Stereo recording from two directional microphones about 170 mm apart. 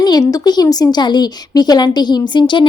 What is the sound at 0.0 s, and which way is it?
Speech, 20° left (ahead or behind).